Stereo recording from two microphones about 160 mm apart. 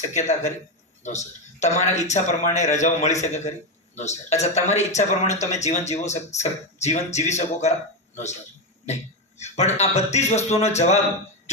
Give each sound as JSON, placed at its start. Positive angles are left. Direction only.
{"t": 0.1, "sound": "a man's voice", "side_deg": 50}
{"t": 9.4, "sound": "speech", "side_deg": 45}